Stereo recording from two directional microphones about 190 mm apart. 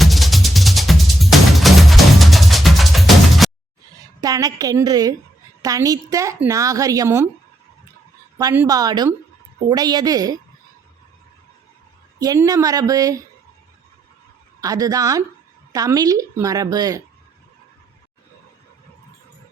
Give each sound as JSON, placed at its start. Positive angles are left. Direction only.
{"t": 0.0, "sound": "music", "side_deg": 0}
{"t": 4.2, "sound": "a woman's voice", "side_deg": -20}
{"t": 8.4, "sound": "a woman's voice", "side_deg": -20}
{"t": 12.2, "sound": "a woman's voice", "side_deg": -20}
{"t": 14.6, "sound": "a woman's voice", "side_deg": -20}